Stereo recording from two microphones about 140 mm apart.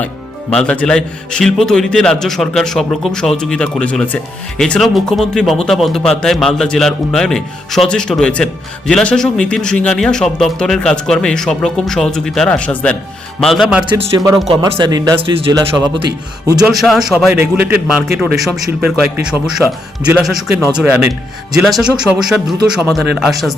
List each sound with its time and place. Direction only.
0.5 s a man's voice: 10° left (ahead or behind)
14.8 s speech: 25° right (ahead or behind)
15.2 s speech: 40° right (ahead or behind)
16.6 s a man's voice: centre (ahead or behind)